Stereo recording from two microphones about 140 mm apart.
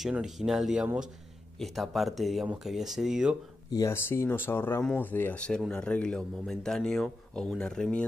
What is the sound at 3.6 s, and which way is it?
Speech, 25° left (ahead or behind).